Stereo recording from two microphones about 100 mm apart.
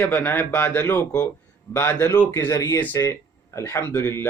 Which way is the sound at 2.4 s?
35° left (ahead or behind).